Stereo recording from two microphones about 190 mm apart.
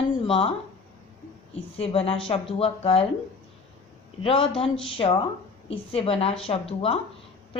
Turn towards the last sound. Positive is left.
turn(degrees=30)  # may be behind; listen again after turning